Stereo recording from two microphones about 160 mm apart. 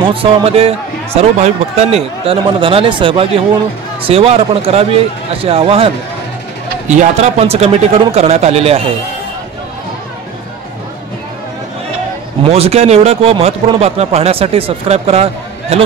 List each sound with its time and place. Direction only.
0.0 s speech: 35° right (ahead or behind)
6.9 s speech: 45° right (ahead or behind)
12.4 s speech: 40° right (ahead or behind)